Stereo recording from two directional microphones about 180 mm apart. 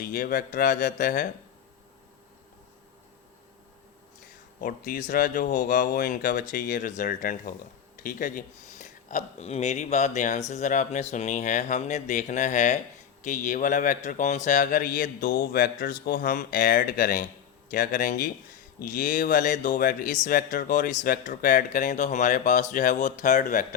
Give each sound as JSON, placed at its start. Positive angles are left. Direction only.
{"t": 0.0, "sound": "speech", "side_deg": 55}
{"t": 4.6, "sound": "speech", "side_deg": 50}